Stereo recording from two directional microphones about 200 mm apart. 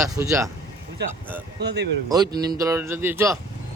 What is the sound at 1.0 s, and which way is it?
Speech, 55° right (ahead or behind).